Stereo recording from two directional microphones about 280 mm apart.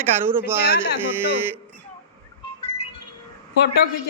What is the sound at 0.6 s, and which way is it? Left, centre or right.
Speech, left.